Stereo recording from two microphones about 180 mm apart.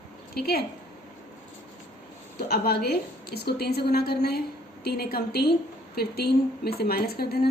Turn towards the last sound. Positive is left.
turn(degrees=60)  # may be behind; listen again after turning